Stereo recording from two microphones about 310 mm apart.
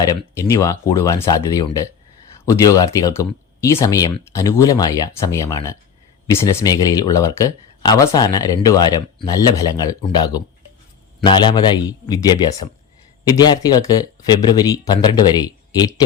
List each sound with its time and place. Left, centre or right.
0.3 s speech: centre